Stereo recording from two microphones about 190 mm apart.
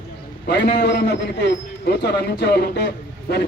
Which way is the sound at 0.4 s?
60° left (ahead or behind).